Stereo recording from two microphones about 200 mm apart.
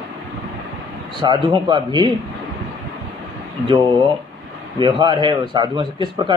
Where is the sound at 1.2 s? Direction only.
25° right (ahead or behind).